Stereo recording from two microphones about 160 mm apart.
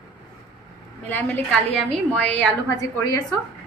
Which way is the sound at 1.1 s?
10° left (ahead or behind).